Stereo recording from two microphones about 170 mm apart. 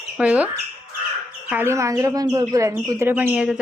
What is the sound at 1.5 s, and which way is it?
Speech, 15° right (ahead or behind).